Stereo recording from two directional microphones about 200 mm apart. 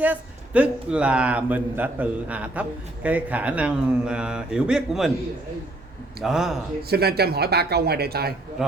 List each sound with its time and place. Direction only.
0.0 s a man's voice: 5° right (ahead or behind)
6.2 s speech: centre (ahead or behind)
6.8 s speech: 50° right (ahead or behind)